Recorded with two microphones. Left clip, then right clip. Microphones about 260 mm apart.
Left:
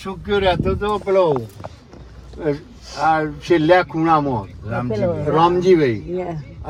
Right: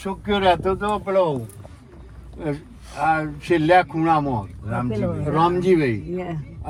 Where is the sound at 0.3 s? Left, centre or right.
Right.